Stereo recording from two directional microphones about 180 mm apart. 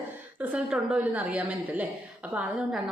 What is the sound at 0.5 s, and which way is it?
A woman's voice, 5° right (ahead or behind).